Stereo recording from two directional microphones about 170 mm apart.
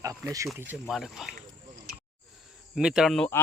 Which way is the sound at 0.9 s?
Centre (ahead or behind).